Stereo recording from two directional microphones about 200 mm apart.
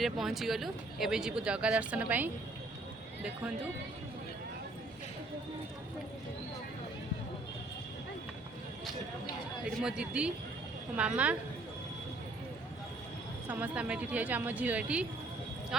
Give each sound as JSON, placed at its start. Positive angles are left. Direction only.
{"t": 0.0, "sound": "speech", "side_deg": 0}
{"t": 9.8, "sound": "a woman's voice", "side_deg": -5}
{"t": 13.5, "sound": "a woman's voice", "side_deg": -5}